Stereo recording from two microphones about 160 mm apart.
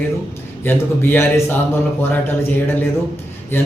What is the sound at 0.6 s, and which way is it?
A man's voice, 15° left (ahead or behind).